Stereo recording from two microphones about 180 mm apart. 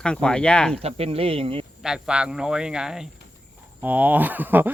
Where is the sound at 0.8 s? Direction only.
35° right (ahead or behind).